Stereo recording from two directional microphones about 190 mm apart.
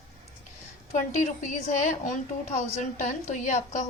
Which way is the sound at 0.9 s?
40° left (ahead or behind).